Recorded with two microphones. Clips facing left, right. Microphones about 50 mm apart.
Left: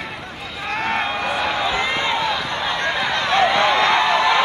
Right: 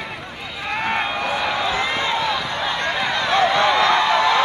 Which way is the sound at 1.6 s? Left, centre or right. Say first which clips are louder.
Left 1 dB; left.